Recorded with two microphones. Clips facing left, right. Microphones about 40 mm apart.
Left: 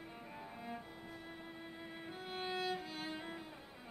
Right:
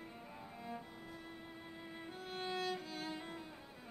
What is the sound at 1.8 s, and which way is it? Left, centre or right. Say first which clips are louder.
Music: right 1 dB; centre.